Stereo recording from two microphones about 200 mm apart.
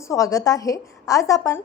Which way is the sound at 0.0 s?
15° left (ahead or behind).